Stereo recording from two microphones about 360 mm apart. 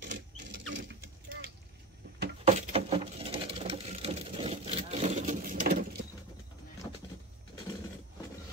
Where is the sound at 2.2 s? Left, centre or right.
Right.